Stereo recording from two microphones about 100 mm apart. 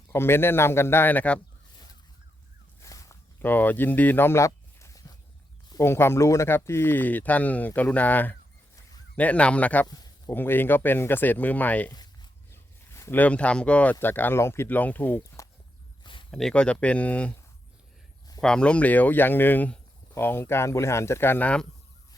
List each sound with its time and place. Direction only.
0.1 s speech: 25° left (ahead or behind)
2.8 s walk: 30° left (ahead or behind)
3.4 s speech: 20° left (ahead or behind)
9.8 s speech: 40° left (ahead or behind)
10.2 s speech: 20° left (ahead or behind)
11.9 s a sound: 40° left (ahead or behind)
12.5 s a sound: 25° left (ahead or behind)
13.1 s speech: 15° left (ahead or behind)
15.2 s walk: 35° left (ahead or behind)
16.3 s speech: 5° left (ahead or behind)
18.3 s speech: 10° left (ahead or behind)